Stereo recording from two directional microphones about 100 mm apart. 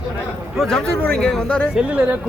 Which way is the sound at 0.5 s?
5° left (ahead or behind).